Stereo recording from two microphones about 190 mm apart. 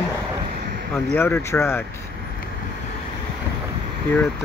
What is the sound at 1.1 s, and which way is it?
Speech, 10° left (ahead or behind).